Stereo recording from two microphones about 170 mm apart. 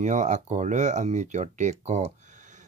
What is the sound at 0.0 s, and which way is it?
Speech, 45° right (ahead or behind).